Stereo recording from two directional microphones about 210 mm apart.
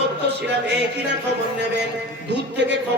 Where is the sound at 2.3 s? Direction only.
55° right (ahead or behind).